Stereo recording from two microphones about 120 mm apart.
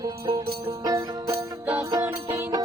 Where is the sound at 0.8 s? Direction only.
30° right (ahead or behind).